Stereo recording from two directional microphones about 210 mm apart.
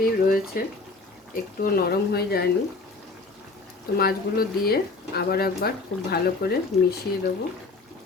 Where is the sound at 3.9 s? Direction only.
45° left (ahead or behind).